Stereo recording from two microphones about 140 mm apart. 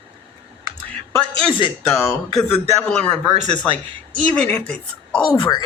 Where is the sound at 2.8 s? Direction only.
5° left (ahead or behind).